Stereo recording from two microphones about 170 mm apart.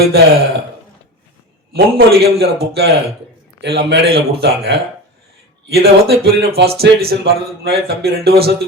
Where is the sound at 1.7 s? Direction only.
65° right (ahead or behind).